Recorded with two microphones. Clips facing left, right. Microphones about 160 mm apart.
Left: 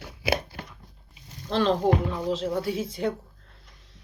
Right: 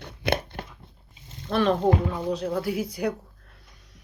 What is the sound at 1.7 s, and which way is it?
Speech, 25° right (ahead or behind).